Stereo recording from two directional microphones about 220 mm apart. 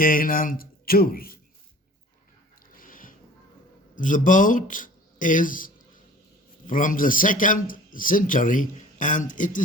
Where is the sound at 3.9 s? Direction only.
35° left (ahead or behind).